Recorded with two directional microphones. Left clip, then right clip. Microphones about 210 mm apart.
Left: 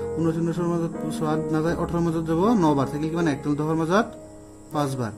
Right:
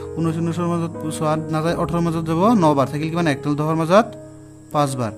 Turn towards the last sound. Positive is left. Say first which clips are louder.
# right 6 dB
turn(degrees=-50)  # may be behind; listen again after turning